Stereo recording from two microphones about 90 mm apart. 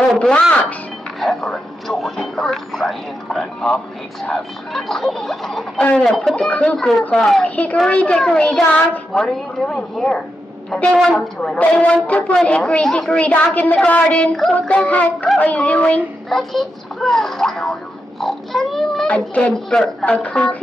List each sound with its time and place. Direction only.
0.2 s a woman's voice: 10° left (ahead or behind)
7.4 s a woman's voice: 15° left (ahead or behind)
16.3 s speech: centre (ahead or behind)
18.2 s a sound: centre (ahead or behind)
19.0 s a woman's voice: 15° left (ahead or behind)